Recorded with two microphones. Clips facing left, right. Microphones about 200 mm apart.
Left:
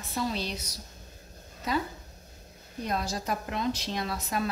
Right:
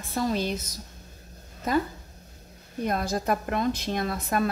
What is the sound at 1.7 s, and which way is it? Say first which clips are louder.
Speech: right 5 dB; 50° right (ahead or behind).